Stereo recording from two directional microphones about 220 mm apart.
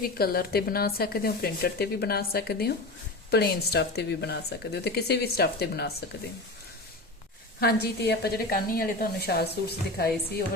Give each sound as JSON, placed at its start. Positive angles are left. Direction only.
{"t": 0.0, "sound": "speech", "side_deg": 45}
{"t": 7.6, "sound": "speech", "side_deg": 45}